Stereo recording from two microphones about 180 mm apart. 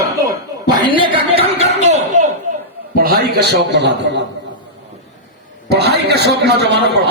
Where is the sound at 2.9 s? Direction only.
55° right (ahead or behind); by 4.2 s 75° right (ahead or behind).